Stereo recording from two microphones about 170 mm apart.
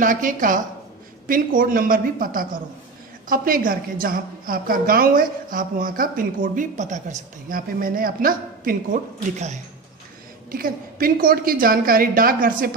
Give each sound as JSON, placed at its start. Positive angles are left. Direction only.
{"t": 0.0, "sound": "a woman's voice", "side_deg": -50}
{"t": 10.5, "sound": "a woman's voice", "side_deg": -55}